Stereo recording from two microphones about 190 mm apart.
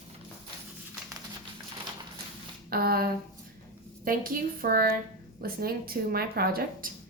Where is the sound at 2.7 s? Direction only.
55° right (ahead or behind).